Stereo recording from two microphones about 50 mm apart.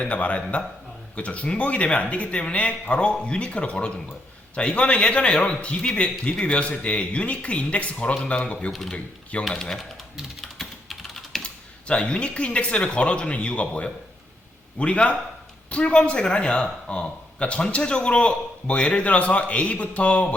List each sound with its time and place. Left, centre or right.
0.0 s a man's voice: left
9.4 s speech: centre
10.6 s typing: centre
11.4 s a man's voice: left